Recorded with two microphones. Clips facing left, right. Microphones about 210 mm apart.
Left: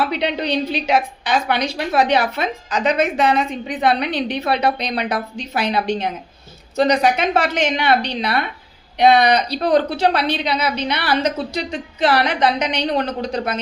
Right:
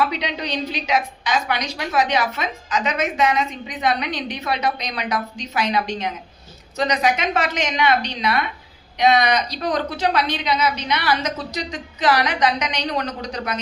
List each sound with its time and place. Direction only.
0.4 s a woman's voice: 30° left (ahead or behind)